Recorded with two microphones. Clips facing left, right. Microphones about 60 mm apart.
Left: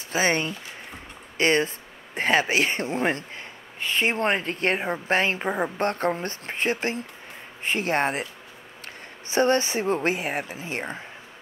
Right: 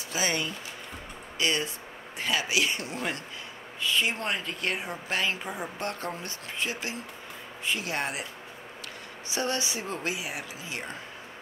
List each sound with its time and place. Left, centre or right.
0.1 s speech: left
9.3 s speech: left